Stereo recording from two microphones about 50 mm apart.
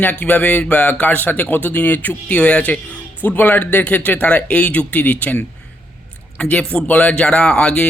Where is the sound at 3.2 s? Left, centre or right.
Left.